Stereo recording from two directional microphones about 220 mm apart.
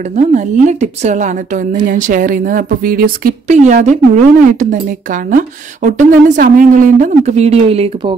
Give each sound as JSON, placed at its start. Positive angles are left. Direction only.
{"t": 0.1, "sound": "a woman's voice", "side_deg": -30}